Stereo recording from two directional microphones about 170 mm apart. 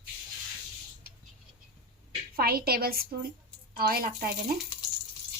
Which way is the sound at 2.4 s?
65° right (ahead or behind).